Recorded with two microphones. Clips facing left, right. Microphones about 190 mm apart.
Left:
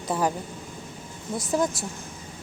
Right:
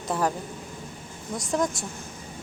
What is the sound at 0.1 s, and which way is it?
Speech, centre (ahead or behind).